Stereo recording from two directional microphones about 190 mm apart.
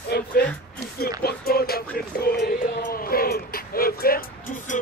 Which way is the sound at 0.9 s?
55° left (ahead or behind).